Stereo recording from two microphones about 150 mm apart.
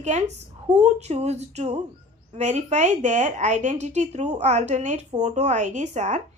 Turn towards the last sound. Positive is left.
turn(degrees=-50)  # may be behind; listen again after turning